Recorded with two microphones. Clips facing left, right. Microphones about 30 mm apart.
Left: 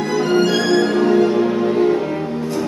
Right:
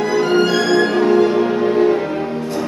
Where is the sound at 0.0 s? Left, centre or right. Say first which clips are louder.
Right 1 dB; centre.